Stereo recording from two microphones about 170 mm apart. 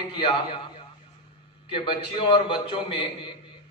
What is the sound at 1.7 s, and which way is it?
A man's voice, 30° left (ahead or behind).